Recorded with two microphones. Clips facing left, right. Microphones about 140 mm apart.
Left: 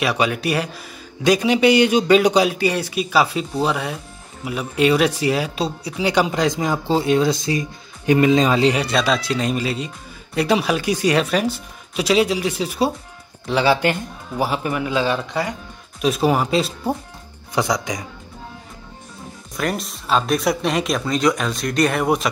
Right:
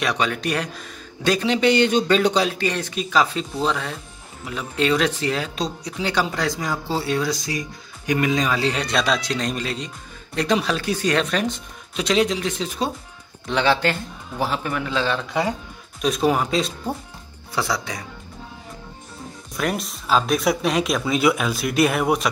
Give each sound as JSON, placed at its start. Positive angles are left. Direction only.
{"t": 0.0, "sound": "speech", "side_deg": 5}
{"t": 8.7, "sound": "speech", "side_deg": 5}
{"t": 17.6, "sound": "speech", "side_deg": 15}
{"t": 19.5, "sound": "speech", "side_deg": 0}